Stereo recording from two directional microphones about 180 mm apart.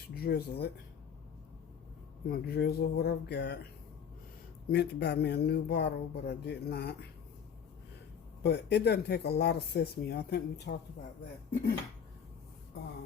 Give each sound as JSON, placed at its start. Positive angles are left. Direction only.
{"t": 0.1, "sound": "speech", "side_deg": 60}
{"t": 2.2, "sound": "speech", "side_deg": 60}
{"t": 4.7, "sound": "speech", "side_deg": 65}
{"t": 8.4, "sound": "speech", "side_deg": 65}